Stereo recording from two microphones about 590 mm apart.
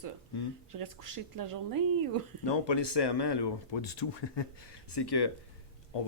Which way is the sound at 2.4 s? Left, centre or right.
Left.